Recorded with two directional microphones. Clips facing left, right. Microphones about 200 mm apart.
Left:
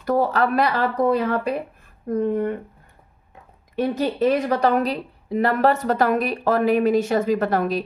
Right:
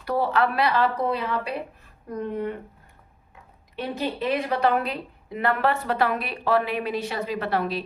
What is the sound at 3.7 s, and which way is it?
A woman's voice, 45° left (ahead or behind).